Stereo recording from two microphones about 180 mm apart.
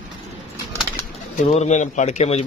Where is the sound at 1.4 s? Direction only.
40° left (ahead or behind).